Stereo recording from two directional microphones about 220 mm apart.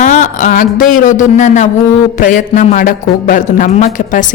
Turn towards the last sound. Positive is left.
turn(degrees=35)  # may be behind; listen again after turning